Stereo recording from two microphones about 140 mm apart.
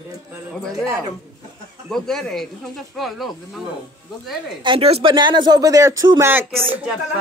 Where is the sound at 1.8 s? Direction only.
Centre (ahead or behind).